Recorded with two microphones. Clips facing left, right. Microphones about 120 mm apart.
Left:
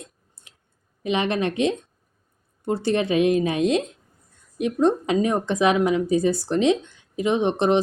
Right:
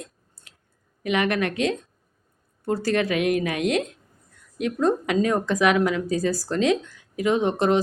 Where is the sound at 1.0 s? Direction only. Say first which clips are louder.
Even; 25° left (ahead or behind).